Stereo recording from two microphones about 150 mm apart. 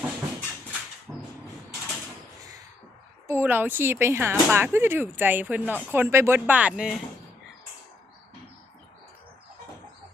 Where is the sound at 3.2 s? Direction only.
15° right (ahead or behind).